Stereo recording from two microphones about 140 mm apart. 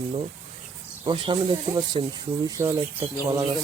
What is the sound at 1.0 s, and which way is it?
Speech, 35° right (ahead or behind).